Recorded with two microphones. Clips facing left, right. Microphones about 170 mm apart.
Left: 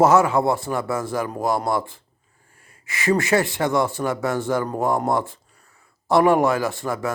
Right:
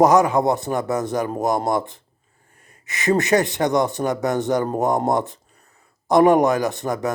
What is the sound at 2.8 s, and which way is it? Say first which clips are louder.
A man's voice: right 1 dB; 20° right (ahead or behind).